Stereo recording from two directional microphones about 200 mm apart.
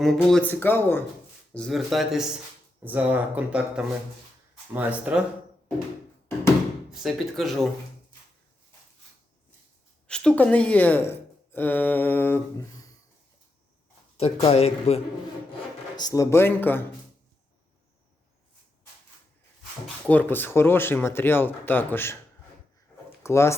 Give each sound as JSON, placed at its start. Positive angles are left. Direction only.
{"t": 0.0, "sound": "speech", "side_deg": 0}
{"t": 6.9, "sound": "speech", "side_deg": 0}
{"t": 10.1, "sound": "speech", "side_deg": 5}
{"t": 14.2, "sound": "speech", "side_deg": 30}
{"t": 16.0, "sound": "speech", "side_deg": 20}
{"t": 20.1, "sound": "speech", "side_deg": 10}
{"t": 23.2, "sound": "speech", "side_deg": 15}